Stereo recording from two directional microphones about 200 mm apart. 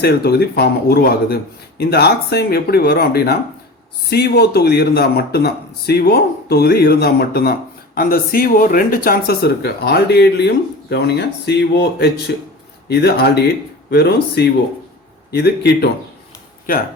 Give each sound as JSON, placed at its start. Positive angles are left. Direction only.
{"t": 0.0, "sound": "speech", "side_deg": 55}